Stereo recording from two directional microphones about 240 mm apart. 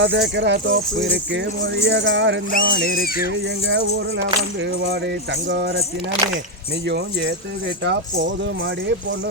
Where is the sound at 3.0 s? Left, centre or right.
Left.